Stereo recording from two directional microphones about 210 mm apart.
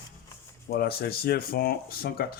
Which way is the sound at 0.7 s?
45° left (ahead or behind).